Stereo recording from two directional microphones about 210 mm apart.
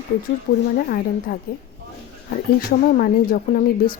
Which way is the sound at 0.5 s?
55° left (ahead or behind).